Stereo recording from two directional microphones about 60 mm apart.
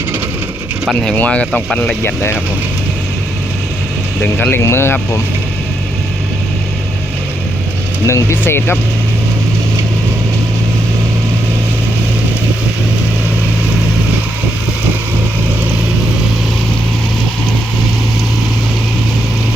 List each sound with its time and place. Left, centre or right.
1.1 s speech: left
2.0 s speech: left
4.2 s speech: left
4.5 s speech: left
8.0 s speech: left